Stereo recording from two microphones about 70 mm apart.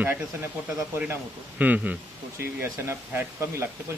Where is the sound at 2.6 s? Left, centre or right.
Right.